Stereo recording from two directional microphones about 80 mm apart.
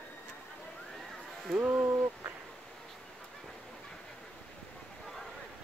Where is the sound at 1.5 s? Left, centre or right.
Centre.